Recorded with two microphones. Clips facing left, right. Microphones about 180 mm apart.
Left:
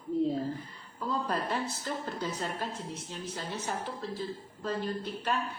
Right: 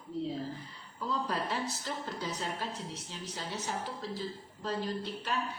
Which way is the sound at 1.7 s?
55° left (ahead or behind).